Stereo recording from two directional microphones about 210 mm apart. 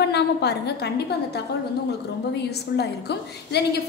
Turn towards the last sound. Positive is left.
turn(degrees=50)  # may be behind; listen again after turning